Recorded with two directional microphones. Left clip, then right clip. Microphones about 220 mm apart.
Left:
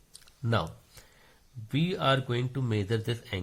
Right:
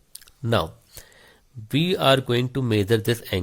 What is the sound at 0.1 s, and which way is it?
Speech, 40° right (ahead or behind).